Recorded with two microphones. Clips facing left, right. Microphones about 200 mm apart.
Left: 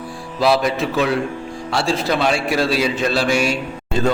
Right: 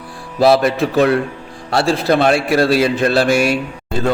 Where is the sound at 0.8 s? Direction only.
55° right (ahead or behind).